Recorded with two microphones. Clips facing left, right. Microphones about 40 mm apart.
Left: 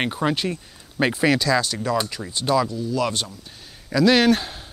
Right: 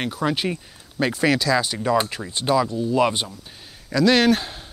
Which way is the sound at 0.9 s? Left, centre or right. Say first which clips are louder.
Left 1 dB; centre.